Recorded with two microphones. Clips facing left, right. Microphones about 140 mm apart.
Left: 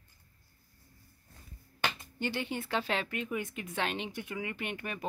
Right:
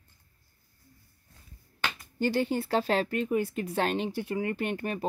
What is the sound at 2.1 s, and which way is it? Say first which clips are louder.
Speech: right 8 dB; 40° right (ahead or behind).